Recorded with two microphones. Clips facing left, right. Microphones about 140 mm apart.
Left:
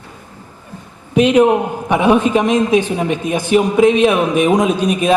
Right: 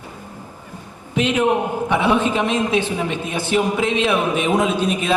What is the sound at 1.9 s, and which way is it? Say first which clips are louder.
A man's voice: left 6 dB; 15° left (ahead or behind).